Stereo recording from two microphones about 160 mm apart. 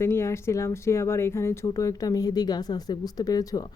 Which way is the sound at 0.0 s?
15° left (ahead or behind).